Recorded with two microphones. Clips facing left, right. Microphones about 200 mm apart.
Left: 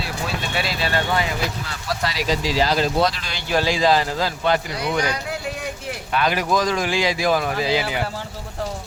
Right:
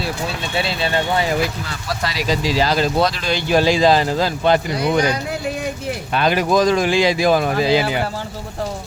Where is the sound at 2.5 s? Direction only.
90° right.